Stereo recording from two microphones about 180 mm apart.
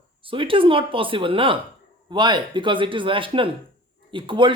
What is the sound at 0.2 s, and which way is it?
Speech, 30° right (ahead or behind).